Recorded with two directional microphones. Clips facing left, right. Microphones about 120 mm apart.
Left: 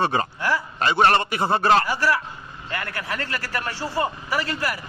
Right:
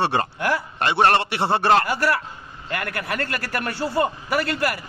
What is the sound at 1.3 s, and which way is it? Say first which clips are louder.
Speech: even; 70° right (ahead or behind).